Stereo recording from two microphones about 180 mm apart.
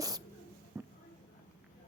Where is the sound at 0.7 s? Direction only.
10° right (ahead or behind).